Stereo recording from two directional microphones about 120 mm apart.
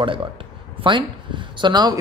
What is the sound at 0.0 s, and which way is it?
Speech, 45° right (ahead or behind).